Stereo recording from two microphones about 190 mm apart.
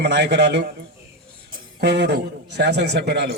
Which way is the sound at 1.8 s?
60° right (ahead or behind).